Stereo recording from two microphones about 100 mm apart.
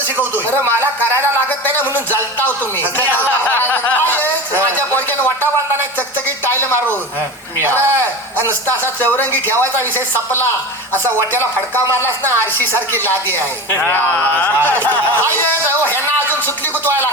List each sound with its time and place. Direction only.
0.2 s speech: 25° right (ahead or behind)
2.5 s speech: 20° left (ahead or behind)
6.5 s a sound: 25° left (ahead or behind)
7.6 s speech: 25° right (ahead or behind)
7.9 s a sound: 20° left (ahead or behind)
9.0 s speech: 20° left (ahead or behind)
11.9 s speech: 25° right (ahead or behind)
13.7 s music: 20° left (ahead or behind)
14.5 s speech: 20° right (ahead or behind)